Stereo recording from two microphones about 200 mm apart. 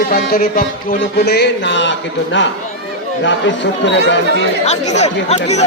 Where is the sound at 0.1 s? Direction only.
50° left (ahead or behind).